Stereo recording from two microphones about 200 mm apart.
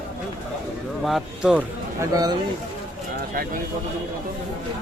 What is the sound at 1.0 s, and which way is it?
Speech, centre (ahead or behind).